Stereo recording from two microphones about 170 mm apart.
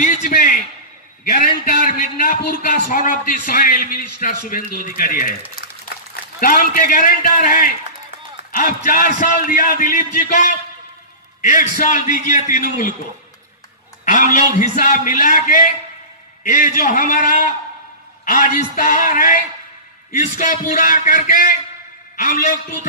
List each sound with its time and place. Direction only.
0.0 s a man's voice: 45° left (ahead or behind)
6.4 s a man's voice: 55° left (ahead or behind)
14.0 s a man's voice: 50° left (ahead or behind)